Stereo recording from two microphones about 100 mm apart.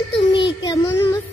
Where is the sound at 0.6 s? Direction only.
30° left (ahead or behind).